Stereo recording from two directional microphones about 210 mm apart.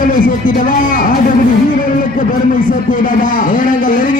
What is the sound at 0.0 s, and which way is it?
Speech, 40° left (ahead or behind).